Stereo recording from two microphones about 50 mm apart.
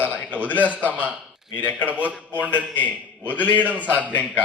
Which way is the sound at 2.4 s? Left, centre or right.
Left.